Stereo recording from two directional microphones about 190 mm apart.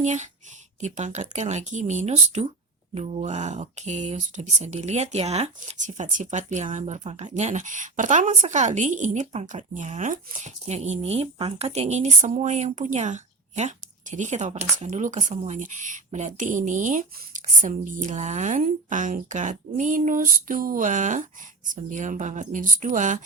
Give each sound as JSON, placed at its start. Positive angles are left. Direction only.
{"t": 0.0, "sound": "speech", "side_deg": -40}